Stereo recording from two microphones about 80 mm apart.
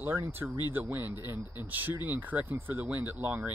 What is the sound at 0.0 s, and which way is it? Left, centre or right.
Speech, right.